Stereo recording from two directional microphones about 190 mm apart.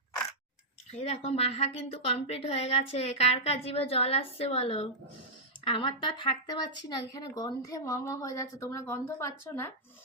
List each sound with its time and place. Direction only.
0.9 s a woman's voice: 35° left (ahead or behind); by 9.7 s 15° left (ahead or behind)